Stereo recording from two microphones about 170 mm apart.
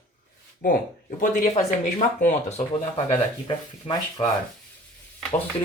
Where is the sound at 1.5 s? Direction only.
45° left (ahead or behind).